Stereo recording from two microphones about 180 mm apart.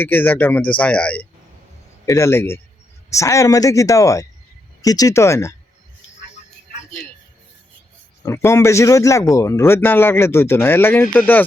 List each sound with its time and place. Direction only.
0.0 s speech: 10° left (ahead or behind)
8.2 s speech: 15° left (ahead or behind)